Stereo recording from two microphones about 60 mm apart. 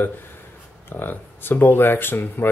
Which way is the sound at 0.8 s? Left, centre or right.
Left.